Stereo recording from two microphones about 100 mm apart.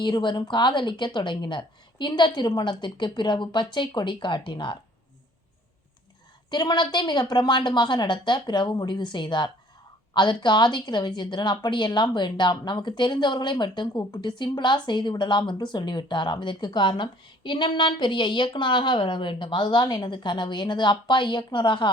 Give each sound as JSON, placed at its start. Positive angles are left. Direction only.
{"t": 0.0, "sound": "speech", "side_deg": 50}
{"t": 6.5, "sound": "speech", "side_deg": 45}